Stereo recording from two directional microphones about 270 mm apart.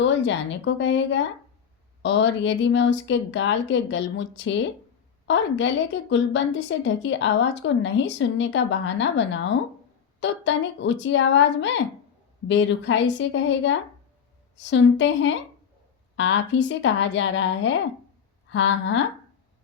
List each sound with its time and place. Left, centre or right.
0.0 s a woman's voice: left